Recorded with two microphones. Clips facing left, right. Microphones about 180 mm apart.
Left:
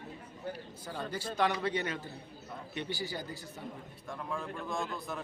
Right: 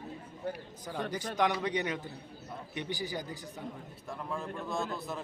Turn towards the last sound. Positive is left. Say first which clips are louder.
# right 2 dB
turn(degrees=0)  # may be behind; listen again after turning